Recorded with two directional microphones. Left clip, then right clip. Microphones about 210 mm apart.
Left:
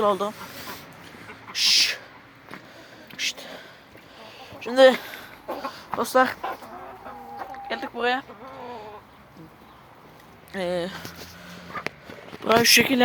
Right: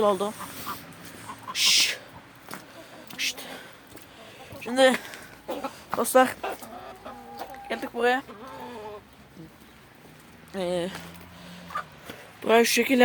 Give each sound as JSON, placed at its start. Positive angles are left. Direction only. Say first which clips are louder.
{"t": 0.0, "sound": "a sound", "louder": "left 1 dB", "side_deg": -15}
{"t": 3.2, "sound": "whispering", "louder": "left 1 dB", "side_deg": -5}
{"t": 4.2, "sound": "a sound", "louder": "left 3 dB", "side_deg": 0}
{"t": 5.9, "sound": "speech", "louder": "even", "side_deg": -15}
{"t": 7.3, "sound": "chicken", "louder": "left 2 dB", "side_deg": -15}
{"t": 10.5, "sound": "speech", "louder": "left 1 dB", "side_deg": -5}
{"t": 12.4, "sound": "speech", "louder": "left 3 dB", "side_deg": -5}